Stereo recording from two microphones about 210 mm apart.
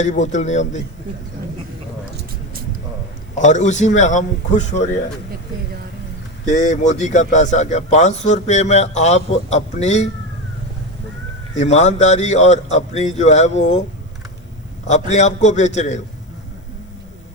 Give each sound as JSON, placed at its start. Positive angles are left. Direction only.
{"t": 0.0, "sound": "a man's voice", "side_deg": 35}
{"t": 3.3, "sound": "a man's voice", "side_deg": 35}
{"t": 6.4, "sound": "a man's voice", "side_deg": 35}
{"t": 11.5, "sound": "a man's voice", "side_deg": 35}
{"t": 14.8, "sound": "a man's voice", "side_deg": 35}